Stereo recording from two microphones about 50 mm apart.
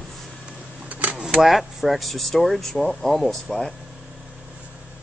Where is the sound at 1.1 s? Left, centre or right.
Centre.